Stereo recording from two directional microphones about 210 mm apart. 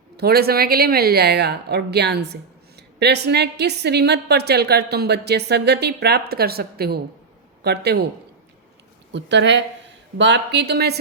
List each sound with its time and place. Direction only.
0.2 s a woman's voice: 50° right (ahead or behind)
9.1 s a woman's voice: 55° right (ahead or behind)